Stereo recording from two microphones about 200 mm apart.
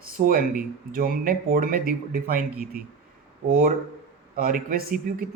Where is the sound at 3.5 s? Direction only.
45° right (ahead or behind).